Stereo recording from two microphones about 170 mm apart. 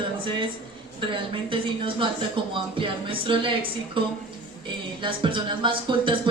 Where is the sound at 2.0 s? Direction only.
30° right (ahead or behind).